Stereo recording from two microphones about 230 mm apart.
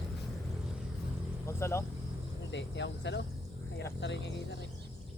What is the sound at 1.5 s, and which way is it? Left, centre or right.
Speech, centre.